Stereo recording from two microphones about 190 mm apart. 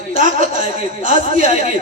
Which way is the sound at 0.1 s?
45° right (ahead or behind).